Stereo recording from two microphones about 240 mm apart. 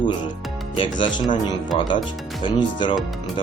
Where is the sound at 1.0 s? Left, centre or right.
Centre.